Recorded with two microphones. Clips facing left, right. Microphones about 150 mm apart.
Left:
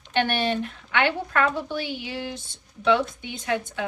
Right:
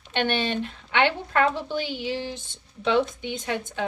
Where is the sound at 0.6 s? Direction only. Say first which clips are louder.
Right 1 dB; 20° right (ahead or behind).